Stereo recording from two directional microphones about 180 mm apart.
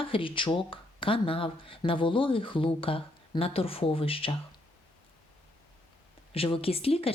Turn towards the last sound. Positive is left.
turn(degrees=30)  # may be behind; listen again after turning